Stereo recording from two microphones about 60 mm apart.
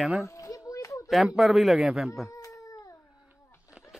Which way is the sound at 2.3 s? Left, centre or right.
Left.